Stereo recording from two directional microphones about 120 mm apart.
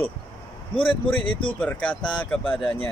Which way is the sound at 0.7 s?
45° left (ahead or behind).